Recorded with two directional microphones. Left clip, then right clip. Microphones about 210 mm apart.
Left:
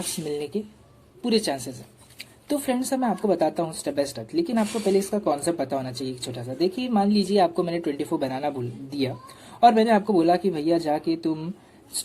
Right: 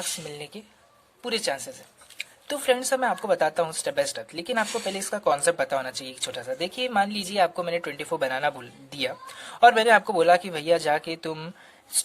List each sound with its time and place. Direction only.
0.3 s speech: 35° right (ahead or behind)